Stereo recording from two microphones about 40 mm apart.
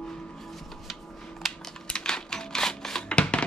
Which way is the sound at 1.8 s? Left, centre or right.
Left.